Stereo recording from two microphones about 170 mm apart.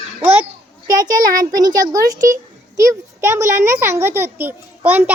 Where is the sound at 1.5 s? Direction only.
20° right (ahead or behind).